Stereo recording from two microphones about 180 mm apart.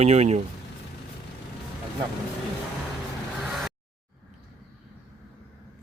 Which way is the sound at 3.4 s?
Centre (ahead or behind).